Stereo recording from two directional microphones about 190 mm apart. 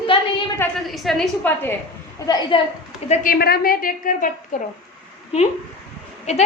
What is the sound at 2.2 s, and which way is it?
Speech, 20° left (ahead or behind).